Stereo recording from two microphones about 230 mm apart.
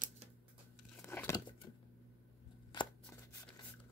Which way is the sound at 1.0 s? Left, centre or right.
Centre.